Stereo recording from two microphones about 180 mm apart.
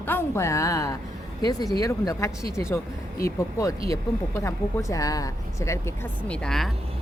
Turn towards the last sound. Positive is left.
turn(degrees=5)  # may be behind; listen again after turning